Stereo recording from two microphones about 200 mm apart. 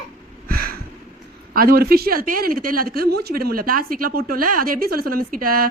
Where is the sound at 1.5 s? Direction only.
50° right (ahead or behind).